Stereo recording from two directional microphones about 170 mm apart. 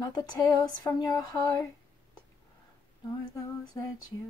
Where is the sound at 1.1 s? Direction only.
20° left (ahead or behind).